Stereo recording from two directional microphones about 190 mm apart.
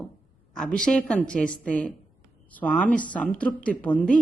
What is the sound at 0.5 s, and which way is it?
Speech, 5° left (ahead or behind).